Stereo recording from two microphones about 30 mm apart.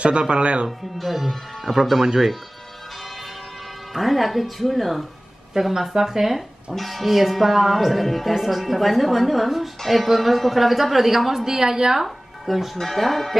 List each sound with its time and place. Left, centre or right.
0.0 s speech: right
0.7 s speech: centre
3.9 s speech: centre
5.5 s speech: centre
6.8 s speech: centre
11.4 s a woman's voice: centre
12.0 s speech: centre
12.7 s speech: centre